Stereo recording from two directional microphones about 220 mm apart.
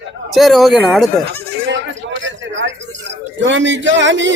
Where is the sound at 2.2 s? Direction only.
55° right (ahead or behind).